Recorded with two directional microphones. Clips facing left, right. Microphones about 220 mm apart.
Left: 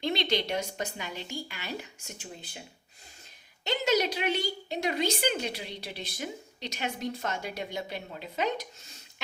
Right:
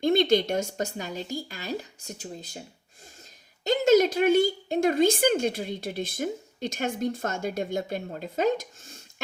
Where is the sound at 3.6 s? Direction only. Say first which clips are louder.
Right 8 dB; 45° right (ahead or behind).